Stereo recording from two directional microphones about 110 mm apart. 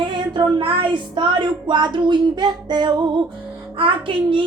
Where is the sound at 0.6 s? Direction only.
50° right (ahead or behind).